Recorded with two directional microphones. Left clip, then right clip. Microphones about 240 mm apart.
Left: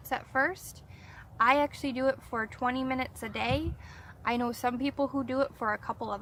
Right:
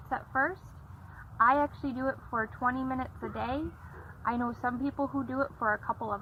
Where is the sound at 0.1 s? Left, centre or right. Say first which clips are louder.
Left 1 dB; left.